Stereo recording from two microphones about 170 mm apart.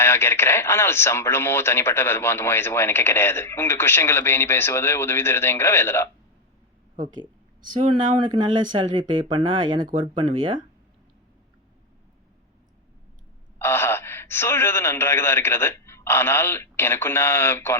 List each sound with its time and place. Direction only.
0.0 s speech: 15° left (ahead or behind)
7.7 s speech: 35° right (ahead or behind)
13.6 s speech: 15° left (ahead or behind)